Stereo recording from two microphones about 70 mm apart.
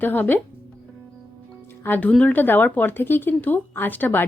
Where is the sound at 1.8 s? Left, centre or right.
Left.